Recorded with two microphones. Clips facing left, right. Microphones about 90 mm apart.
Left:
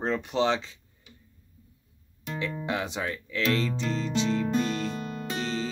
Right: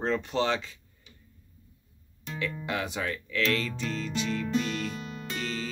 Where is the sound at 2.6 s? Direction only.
25° left (ahead or behind).